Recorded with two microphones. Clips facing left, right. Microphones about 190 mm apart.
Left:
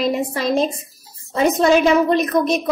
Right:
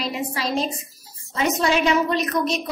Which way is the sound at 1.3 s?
45° left (ahead or behind).